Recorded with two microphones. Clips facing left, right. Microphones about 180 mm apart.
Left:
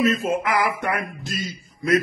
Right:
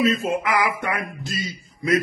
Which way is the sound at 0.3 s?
50° left (ahead or behind).